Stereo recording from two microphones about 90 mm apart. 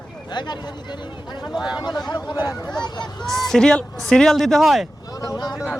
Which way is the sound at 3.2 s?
5° left (ahead or behind).